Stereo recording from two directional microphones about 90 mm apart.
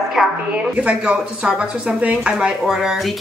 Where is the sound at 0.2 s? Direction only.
5° right (ahead or behind).